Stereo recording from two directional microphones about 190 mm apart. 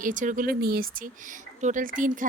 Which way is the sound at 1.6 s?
45° right (ahead or behind).